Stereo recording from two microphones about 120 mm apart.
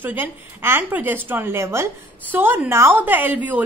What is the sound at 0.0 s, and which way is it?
A woman's voice, 15° right (ahead or behind).